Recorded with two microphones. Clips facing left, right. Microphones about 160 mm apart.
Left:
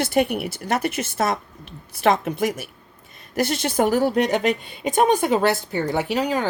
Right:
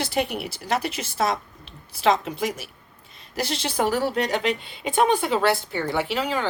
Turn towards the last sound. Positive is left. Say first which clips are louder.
# left 3 dB
turn(degrees=40)  # may be behind; listen again after turning